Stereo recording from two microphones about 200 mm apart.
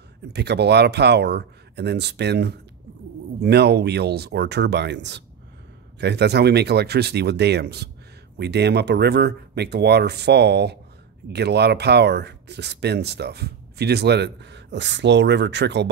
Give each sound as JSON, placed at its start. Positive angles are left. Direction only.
{"t": 0.3, "sound": "speech", "side_deg": -55}